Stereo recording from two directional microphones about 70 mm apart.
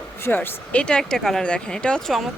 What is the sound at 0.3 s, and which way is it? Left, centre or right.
Speech, left.